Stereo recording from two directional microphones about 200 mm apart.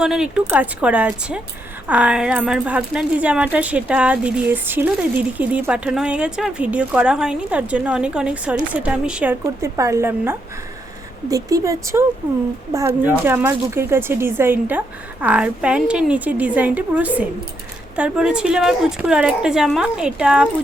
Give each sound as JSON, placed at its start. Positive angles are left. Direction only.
{"t": 0.0, "sound": "a woman's voice", "side_deg": -5}